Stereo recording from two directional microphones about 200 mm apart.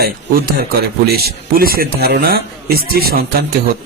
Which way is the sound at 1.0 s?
50° right (ahead or behind).